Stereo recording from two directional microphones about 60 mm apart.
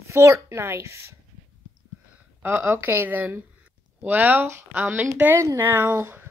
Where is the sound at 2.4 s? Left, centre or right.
Right.